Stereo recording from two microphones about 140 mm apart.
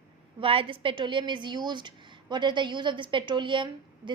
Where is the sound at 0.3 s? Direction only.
40° right (ahead or behind).